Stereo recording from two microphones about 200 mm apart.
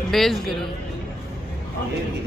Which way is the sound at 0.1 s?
Centre (ahead or behind).